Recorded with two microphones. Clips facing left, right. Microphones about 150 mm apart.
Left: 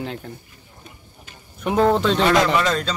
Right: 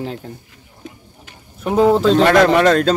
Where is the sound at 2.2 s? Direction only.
60° right (ahead or behind).